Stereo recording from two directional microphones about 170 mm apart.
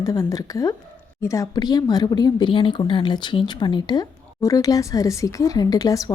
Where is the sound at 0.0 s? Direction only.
20° left (ahead or behind).